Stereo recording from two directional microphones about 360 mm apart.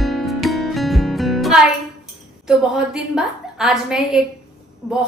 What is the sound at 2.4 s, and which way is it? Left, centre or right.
A woman's voice, centre.